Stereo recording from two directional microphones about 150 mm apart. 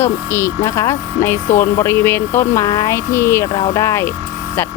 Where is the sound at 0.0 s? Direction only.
15° left (ahead or behind).